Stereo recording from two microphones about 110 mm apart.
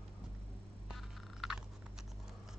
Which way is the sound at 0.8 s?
Centre (ahead or behind).